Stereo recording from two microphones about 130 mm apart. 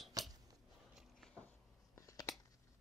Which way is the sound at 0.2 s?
30° right (ahead or behind).